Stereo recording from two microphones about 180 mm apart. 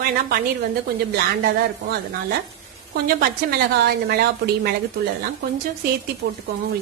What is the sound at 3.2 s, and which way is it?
A woman's voice, 60° right (ahead or behind).